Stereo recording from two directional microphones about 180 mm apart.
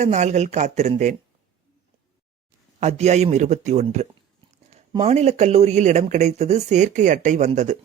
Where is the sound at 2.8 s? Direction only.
40° right (ahead or behind).